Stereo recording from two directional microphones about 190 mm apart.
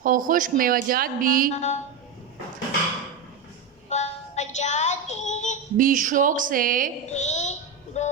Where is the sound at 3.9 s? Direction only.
35° left (ahead or behind).